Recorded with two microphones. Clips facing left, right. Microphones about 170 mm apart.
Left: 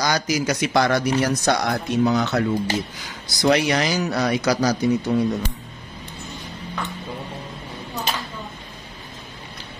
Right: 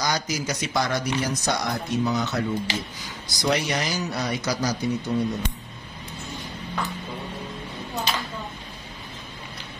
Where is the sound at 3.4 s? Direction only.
75° left (ahead or behind).